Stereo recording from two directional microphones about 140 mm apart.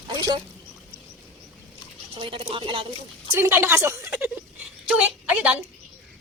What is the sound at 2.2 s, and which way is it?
Speech, 40° right (ahead or behind).